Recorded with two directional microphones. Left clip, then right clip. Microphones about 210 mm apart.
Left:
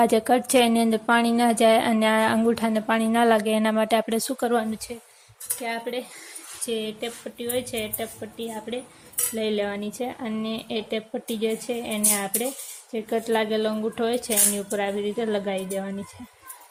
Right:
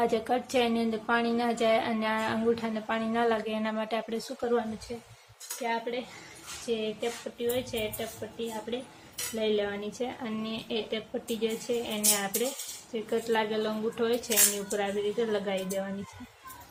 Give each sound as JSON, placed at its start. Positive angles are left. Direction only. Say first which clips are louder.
{"t": 0.0, "sound": "a woman's voice", "louder": "left 8 dB", "side_deg": 45}
{"t": 5.6, "sound": "a woman's voice", "louder": "left 2 dB", "side_deg": 50}